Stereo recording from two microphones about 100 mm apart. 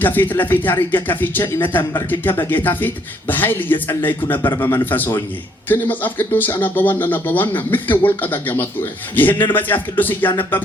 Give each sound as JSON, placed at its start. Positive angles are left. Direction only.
{"t": 0.0, "sound": "speech", "side_deg": 20}